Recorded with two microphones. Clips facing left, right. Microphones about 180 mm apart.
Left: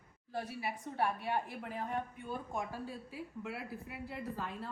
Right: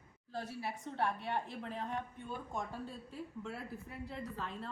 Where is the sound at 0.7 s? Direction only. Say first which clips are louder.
Left 1 dB; 10° left (ahead or behind).